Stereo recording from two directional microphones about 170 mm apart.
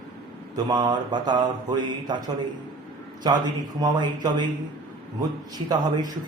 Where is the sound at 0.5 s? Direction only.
25° right (ahead or behind).